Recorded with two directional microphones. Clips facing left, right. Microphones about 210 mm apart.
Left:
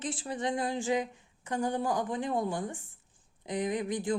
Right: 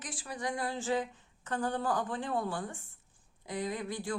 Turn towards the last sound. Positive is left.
turn(degrees=20)  # may be behind; listen again after turning